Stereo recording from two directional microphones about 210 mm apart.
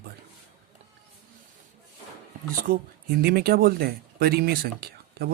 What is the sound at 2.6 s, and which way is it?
Speech, 45° right (ahead or behind).